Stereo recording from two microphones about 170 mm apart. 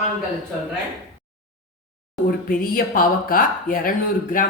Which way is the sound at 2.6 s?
60° left (ahead or behind).